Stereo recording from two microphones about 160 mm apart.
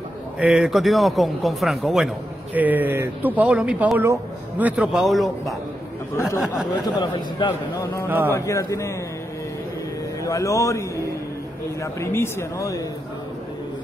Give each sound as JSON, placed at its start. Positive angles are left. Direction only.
{"t": 0.4, "sound": "speech", "side_deg": -5}
{"t": 6.1, "sound": "a man's voice", "side_deg": 15}
{"t": 10.2, "sound": "a man's voice", "side_deg": 20}